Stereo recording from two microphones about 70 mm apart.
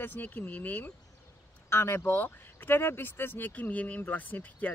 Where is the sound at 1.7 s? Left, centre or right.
Left.